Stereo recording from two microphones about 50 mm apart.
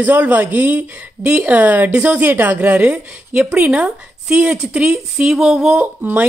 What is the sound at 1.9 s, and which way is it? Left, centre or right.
Speech, right.